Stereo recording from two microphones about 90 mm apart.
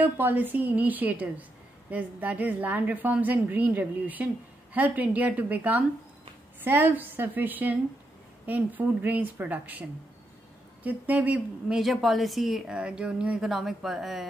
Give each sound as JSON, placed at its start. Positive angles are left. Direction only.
{"t": 0.0, "sound": "a woman's voice", "side_deg": -20}
{"t": 11.7, "sound": "speech", "side_deg": 0}